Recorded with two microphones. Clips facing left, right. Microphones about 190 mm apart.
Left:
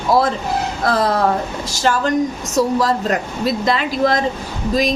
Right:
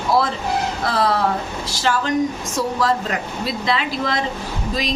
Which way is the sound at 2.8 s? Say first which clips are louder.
Left 3 dB; 40° left (ahead or behind).